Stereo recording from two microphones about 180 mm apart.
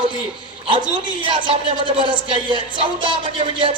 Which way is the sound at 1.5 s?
30° right (ahead or behind).